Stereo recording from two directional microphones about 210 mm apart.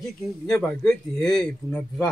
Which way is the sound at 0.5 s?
5° left (ahead or behind).